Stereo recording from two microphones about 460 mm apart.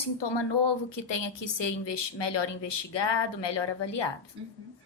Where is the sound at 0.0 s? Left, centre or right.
Left.